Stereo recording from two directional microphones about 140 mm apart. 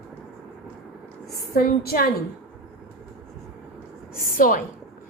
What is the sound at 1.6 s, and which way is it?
Speech, 90° left.